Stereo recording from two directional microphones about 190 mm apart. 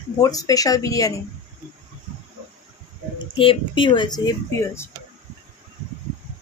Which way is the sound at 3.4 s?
25° left (ahead or behind).